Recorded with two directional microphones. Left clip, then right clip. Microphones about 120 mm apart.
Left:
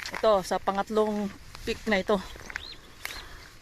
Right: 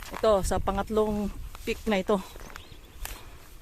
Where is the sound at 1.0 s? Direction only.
15° right (ahead or behind).